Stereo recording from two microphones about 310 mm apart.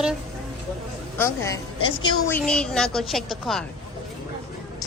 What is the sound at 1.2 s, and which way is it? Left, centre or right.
A woman's voice, centre.